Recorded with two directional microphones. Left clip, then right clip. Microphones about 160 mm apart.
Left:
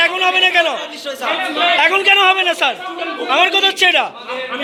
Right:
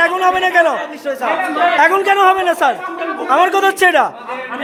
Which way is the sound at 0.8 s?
75° right (ahead or behind).